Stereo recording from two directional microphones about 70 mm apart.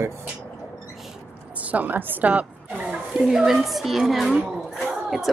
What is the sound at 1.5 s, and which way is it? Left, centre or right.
A woman's voice, right.